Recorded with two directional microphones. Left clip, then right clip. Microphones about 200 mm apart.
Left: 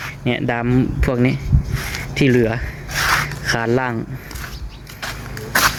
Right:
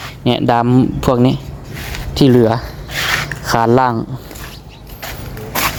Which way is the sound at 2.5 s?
15° right (ahead or behind).